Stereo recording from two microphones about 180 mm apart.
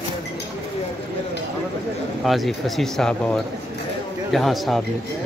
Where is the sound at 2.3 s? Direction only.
Centre (ahead or behind).